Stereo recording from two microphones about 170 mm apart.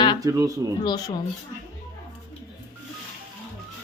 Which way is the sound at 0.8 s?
25° left (ahead or behind).